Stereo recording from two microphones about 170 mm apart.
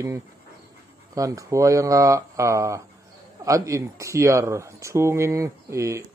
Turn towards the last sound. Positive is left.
turn(degrees=-15)  # may be behind; listen again after turning